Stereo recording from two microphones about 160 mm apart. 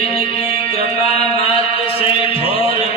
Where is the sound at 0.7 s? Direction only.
35° left (ahead or behind).